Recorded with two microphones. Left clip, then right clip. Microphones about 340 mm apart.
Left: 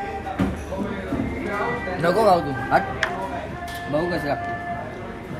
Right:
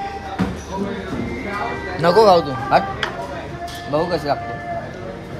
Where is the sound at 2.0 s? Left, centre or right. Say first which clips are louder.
Right 6 dB; right.